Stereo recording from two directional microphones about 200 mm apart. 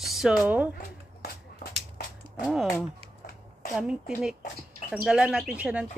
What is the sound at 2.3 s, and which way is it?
Speech, centre (ahead or behind).